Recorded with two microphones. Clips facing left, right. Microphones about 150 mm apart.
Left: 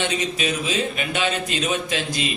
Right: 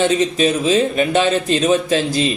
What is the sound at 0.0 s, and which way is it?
Speech, 40° right (ahead or behind).